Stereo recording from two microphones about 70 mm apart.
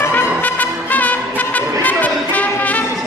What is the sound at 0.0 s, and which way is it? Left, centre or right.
Music, left.